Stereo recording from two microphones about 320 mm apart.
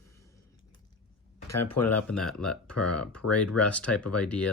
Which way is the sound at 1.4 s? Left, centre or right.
Left.